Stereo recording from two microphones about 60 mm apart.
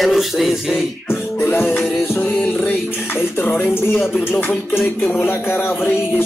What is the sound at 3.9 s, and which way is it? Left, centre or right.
Speech, centre.